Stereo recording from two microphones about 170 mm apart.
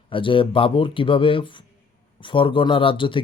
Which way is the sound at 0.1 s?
30° left (ahead or behind).